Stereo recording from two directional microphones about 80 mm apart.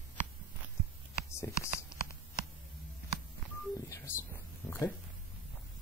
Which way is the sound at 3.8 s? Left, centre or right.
Left.